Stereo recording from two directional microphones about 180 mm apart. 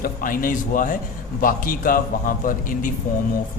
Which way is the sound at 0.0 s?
50° left (ahead or behind).